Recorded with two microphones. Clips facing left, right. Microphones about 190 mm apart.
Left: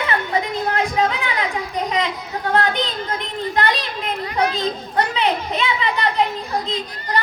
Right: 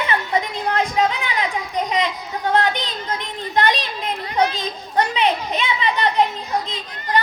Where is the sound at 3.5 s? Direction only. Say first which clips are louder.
Right 2 dB; 20° right (ahead or behind).